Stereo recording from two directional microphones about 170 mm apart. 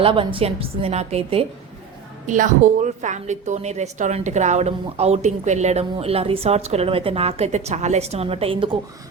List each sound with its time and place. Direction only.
0.0 s a woman's voice: 30° right (ahead or behind)
2.2 s a woman's voice: 50° right (ahead or behind); by 8.7 s 30° right (ahead or behind)